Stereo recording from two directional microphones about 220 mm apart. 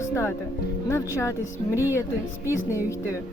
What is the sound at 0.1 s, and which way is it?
A man's voice, 10° left (ahead or behind).